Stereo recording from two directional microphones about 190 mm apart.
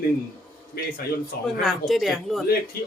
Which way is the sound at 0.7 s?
50° left (ahead or behind).